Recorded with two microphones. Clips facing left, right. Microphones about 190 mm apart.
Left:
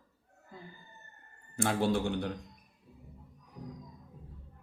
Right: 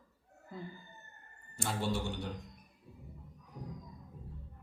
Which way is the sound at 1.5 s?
60° left (ahead or behind).